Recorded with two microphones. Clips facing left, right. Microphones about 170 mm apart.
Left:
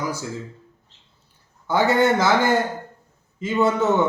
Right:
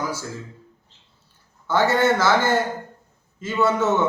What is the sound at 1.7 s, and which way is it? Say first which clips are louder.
A man's voice: left 1 dB; 15° left (ahead or behind).